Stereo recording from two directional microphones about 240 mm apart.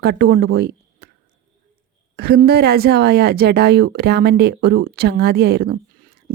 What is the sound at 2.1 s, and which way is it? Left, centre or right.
Speech, right.